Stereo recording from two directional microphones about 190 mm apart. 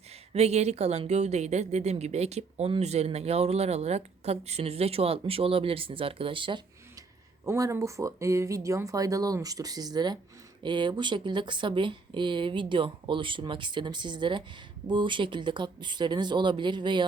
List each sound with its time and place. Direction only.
0.1 s a woman's voice: 35° right (ahead or behind)